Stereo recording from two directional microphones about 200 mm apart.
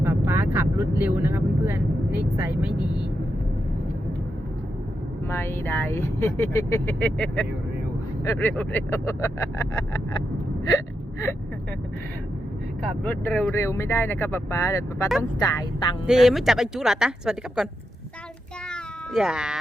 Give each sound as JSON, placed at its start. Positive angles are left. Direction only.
{"t": 0.0, "sound": "speech", "side_deg": -10}
{"t": 5.3, "sound": "speech", "side_deg": 10}
{"t": 13.1, "sound": "speech", "side_deg": 5}
{"t": 16.0, "sound": "speech", "side_deg": 0}
{"t": 18.7, "sound": "cat", "side_deg": -5}